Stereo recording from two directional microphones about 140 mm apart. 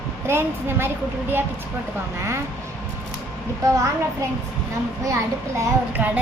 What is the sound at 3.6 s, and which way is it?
Speech, 25° right (ahead or behind).